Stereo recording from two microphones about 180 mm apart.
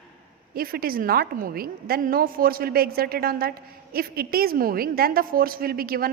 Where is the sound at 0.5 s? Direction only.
55° right (ahead or behind).